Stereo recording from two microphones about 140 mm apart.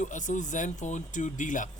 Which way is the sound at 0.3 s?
65° left (ahead or behind).